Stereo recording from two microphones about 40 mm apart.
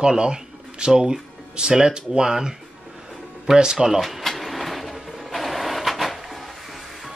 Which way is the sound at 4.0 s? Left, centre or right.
Centre.